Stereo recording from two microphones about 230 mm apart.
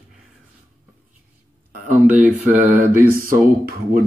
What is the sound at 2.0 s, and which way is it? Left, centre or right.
Speech, centre.